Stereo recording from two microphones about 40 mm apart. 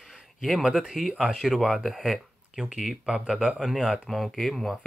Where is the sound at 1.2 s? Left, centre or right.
Centre.